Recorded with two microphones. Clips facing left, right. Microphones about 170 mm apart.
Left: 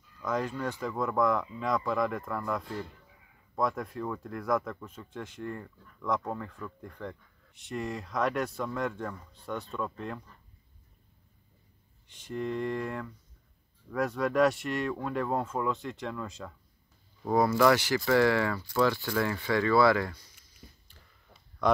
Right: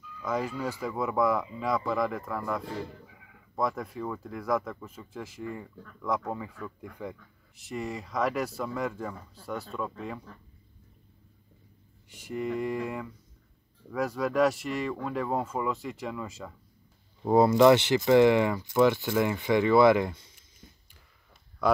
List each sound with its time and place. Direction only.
0.2 s speech: 5° right (ahead or behind)
12.1 s speech: 10° right (ahead or behind)
17.2 s speech: 25° right (ahead or behind)
21.6 s speech: 5° right (ahead or behind)